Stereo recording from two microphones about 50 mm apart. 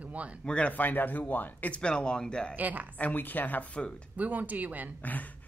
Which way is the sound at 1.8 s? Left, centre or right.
Centre.